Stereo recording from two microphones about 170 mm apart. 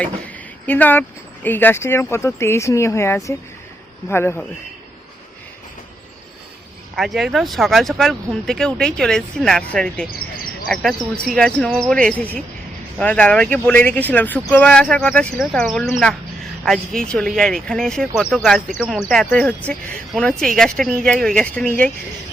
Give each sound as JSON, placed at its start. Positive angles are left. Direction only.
{"t": 0.7, "sound": "speech", "side_deg": 10}
{"t": 6.9, "sound": "speech", "side_deg": 0}